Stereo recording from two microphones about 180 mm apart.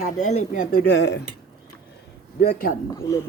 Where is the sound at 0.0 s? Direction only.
45° left (ahead or behind); by 1.2 s 70° left (ahead or behind).